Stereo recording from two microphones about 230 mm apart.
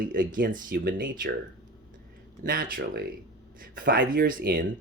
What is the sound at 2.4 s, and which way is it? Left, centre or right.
Speech, right.